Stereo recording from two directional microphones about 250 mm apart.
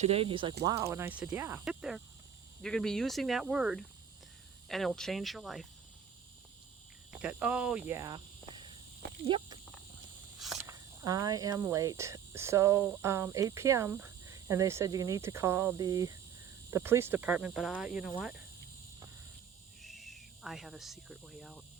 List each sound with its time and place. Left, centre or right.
0.0 s speech: right; by 5.6 s centre
7.2 s speech: centre
9.2 s speech: centre
10.7 s speech: centre
19.8 s speech: centre